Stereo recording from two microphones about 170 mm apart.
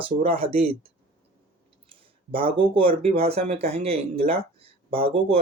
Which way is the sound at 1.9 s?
30° right (ahead or behind).